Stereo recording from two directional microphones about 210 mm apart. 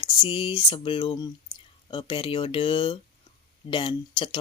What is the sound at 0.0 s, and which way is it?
Speech, 25° left (ahead or behind).